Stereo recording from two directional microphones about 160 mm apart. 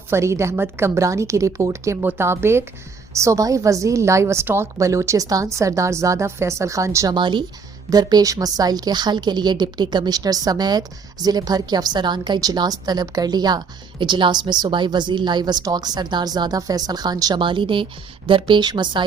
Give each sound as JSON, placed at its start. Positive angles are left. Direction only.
{"t": 0.1, "sound": "a woman's voice", "side_deg": -15}